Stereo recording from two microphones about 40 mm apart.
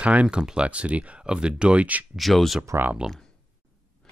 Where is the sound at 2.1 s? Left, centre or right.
Centre.